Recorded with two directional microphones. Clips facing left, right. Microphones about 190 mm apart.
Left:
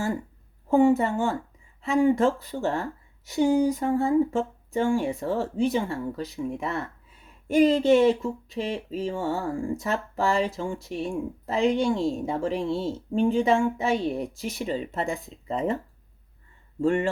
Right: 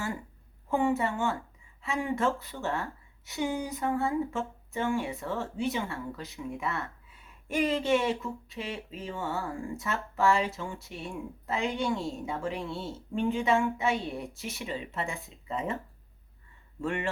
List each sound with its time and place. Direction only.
0.7 s speech: 35° left (ahead or behind)
16.8 s speech: 35° left (ahead or behind)